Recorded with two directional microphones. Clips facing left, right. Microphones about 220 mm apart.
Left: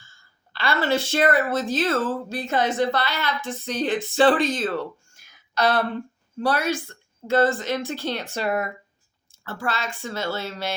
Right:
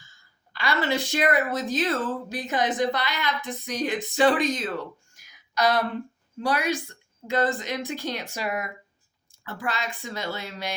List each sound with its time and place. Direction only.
0.5 s a woman's voice: 15° right (ahead or behind)
5.1 s a sound: 15° right (ahead or behind)
6.4 s a woman's voice: 15° right (ahead or behind)